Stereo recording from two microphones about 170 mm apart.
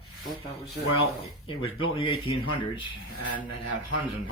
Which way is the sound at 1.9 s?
30° left (ahead or behind).